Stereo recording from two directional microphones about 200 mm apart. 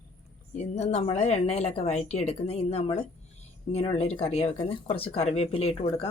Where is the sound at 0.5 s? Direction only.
35° left (ahead or behind).